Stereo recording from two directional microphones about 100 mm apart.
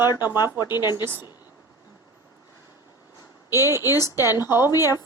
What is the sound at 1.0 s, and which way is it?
Speech, 20° right (ahead or behind).